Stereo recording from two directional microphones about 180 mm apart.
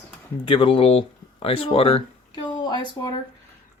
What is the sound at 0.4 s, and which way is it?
Speech, 30° left (ahead or behind).